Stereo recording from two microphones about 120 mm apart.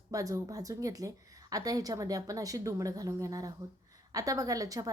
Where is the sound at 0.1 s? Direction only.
30° right (ahead or behind).